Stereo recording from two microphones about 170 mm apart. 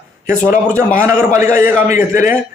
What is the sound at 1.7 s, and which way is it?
Speech, 45° left (ahead or behind).